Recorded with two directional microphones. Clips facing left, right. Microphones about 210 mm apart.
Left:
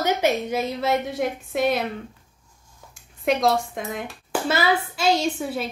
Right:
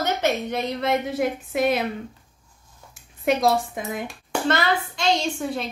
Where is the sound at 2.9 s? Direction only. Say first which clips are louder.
Even; 5° right (ahead or behind).